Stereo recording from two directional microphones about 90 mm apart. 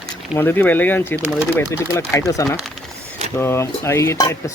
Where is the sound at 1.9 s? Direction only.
35° left (ahead or behind).